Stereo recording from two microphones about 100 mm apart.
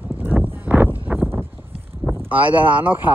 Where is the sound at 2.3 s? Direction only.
15° right (ahead or behind).